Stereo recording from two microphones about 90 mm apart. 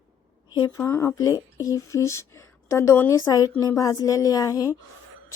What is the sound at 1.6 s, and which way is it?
A woman's voice, 40° left (ahead or behind).